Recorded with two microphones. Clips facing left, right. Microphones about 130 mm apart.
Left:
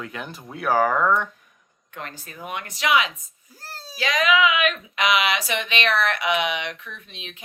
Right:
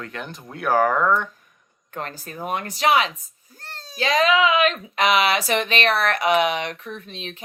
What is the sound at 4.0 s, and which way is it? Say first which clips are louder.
Speech: right 2 dB; 35° right (ahead or behind).